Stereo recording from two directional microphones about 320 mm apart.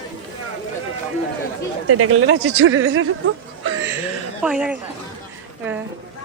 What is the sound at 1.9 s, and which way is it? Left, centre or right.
Speech, right.